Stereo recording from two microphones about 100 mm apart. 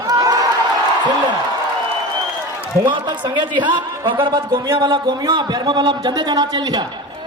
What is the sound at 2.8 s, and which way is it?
A man's voice, 45° right (ahead or behind).